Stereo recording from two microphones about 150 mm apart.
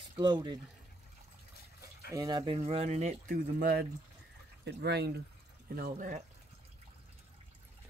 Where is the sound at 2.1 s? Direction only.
25° right (ahead or behind); by 3.3 s 50° right (ahead or behind).